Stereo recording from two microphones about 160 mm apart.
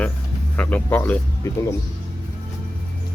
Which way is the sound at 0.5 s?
10° left (ahead or behind).